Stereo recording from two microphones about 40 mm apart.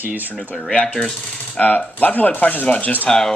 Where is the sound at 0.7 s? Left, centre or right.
Left.